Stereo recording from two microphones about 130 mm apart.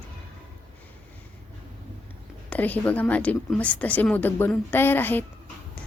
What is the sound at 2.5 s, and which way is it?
A woman's voice, 10° left (ahead or behind).